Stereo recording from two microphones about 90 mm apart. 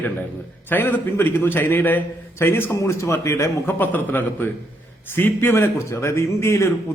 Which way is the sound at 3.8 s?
20° left (ahead or behind).